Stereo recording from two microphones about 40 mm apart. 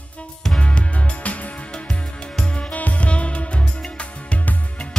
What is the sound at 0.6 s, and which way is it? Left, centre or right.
Music, left.